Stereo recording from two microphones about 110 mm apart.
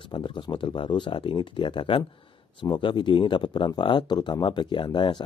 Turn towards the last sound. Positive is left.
turn(degrees=45)  # may be behind; listen again after turning